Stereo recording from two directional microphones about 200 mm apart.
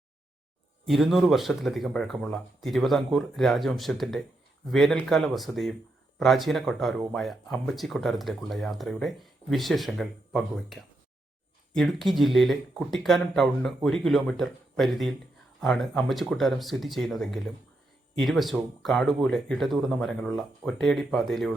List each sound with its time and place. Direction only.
0.9 s speech: centre (ahead or behind)